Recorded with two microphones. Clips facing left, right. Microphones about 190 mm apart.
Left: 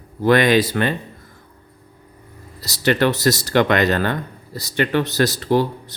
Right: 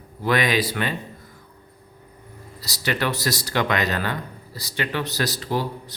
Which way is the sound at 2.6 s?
50° left (ahead or behind).